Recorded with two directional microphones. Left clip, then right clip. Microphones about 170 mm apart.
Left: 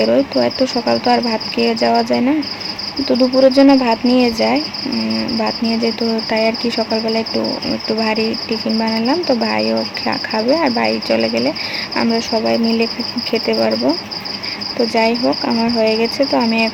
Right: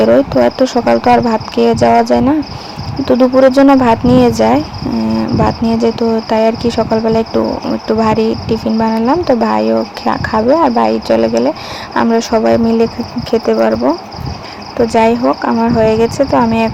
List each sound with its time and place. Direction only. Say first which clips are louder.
0.0 s cricket: right 5 dB; 30° right (ahead or behind)
14.9 s cricket: right 5 dB; 25° right (ahead or behind)